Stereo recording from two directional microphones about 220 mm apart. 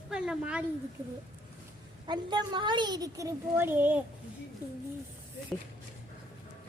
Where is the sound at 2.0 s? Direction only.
20° right (ahead or behind).